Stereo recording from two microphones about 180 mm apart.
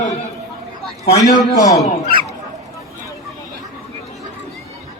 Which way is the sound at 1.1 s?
20° left (ahead or behind).